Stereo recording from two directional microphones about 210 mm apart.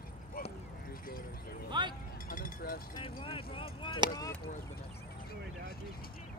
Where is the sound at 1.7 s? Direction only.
20° right (ahead or behind).